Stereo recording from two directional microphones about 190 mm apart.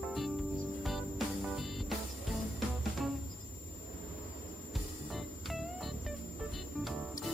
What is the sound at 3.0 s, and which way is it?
Music, centre (ahead or behind).